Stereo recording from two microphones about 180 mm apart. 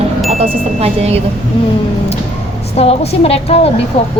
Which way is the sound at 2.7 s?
35° left (ahead or behind).